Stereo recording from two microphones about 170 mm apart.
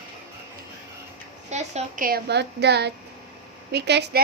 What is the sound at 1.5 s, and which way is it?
Speech, 40° right (ahead or behind).